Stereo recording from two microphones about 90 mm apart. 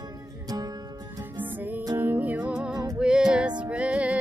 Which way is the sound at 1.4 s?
20° right (ahead or behind).